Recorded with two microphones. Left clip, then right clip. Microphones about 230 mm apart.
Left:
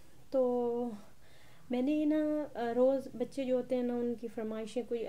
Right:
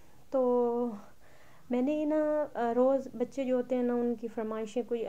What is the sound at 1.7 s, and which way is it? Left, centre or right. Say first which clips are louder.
Speech: right 2 dB; right.